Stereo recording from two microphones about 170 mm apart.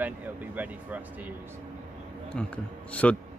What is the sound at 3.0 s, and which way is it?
Speech, 5° left (ahead or behind).